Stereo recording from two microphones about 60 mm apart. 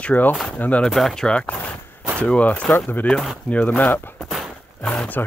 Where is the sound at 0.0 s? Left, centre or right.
Left.